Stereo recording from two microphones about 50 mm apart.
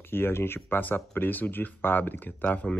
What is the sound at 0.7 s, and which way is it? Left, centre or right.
Speech, left.